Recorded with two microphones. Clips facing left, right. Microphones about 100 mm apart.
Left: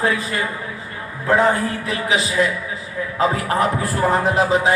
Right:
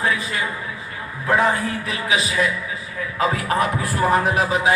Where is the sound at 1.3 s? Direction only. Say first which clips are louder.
Left 2 dB; 25° left (ahead or behind).